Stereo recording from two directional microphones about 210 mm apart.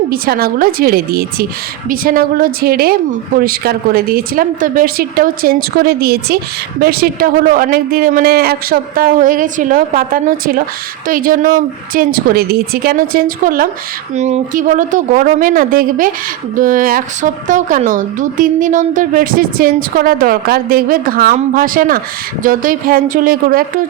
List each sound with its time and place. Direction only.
0.1 s a woman's voice: 45° right (ahead or behind)